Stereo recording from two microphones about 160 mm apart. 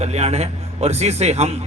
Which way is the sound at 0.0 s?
40° right (ahead or behind).